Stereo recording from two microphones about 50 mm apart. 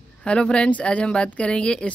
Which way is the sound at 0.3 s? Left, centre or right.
Left.